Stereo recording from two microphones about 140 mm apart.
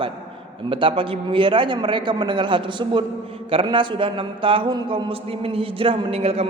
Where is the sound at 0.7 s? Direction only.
40° right (ahead or behind).